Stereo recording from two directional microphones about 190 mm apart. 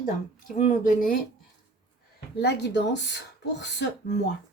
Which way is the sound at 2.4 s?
60° left (ahead or behind).